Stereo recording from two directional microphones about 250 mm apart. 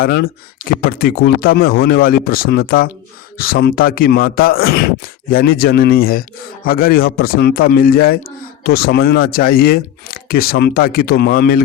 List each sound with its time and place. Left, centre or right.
0.0 s speech: left